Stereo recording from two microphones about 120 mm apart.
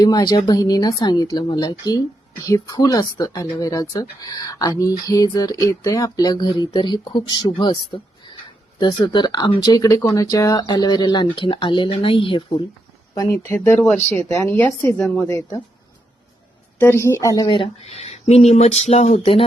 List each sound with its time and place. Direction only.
0.0 s speech: 35° left (ahead or behind)
8.8 s speech: 35° left (ahead or behind)
13.3 s a woman's voice: 20° left (ahead or behind)
16.7 s a woman's voice: 20° left (ahead or behind)
17.8 s speech: 60° left (ahead or behind)